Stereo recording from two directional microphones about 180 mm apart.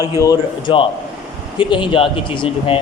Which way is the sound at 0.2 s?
25° left (ahead or behind).